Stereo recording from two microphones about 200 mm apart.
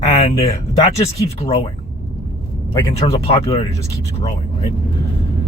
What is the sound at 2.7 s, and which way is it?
Speech, 20° left (ahead or behind).